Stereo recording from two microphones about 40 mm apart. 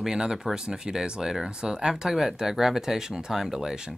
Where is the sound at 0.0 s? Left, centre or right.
Centre.